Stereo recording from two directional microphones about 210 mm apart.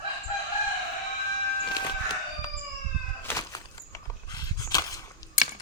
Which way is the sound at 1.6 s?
20° left (ahead or behind).